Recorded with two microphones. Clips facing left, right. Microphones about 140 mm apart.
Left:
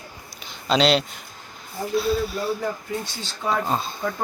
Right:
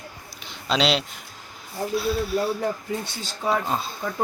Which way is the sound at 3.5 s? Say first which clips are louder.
Even; 5° right (ahead or behind).